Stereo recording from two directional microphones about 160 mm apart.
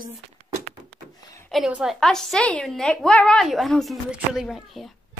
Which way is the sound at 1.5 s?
5° right (ahead or behind).